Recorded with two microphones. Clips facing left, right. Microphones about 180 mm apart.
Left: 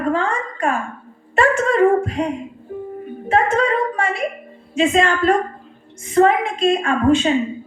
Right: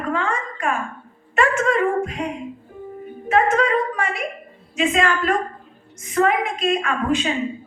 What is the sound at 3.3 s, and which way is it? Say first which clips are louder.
A woman's voice: left 1 dB; 30° left (ahead or behind).